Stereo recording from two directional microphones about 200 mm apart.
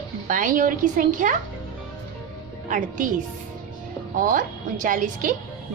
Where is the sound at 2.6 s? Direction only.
40° right (ahead or behind).